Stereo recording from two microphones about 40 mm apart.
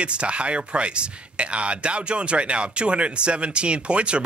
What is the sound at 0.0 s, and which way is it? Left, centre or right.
Speech, right.